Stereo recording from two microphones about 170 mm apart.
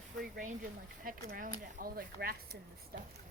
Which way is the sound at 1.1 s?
55° right (ahead or behind).